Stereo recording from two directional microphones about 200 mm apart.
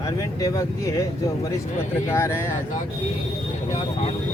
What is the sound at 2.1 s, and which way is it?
Speech, 15° left (ahead or behind).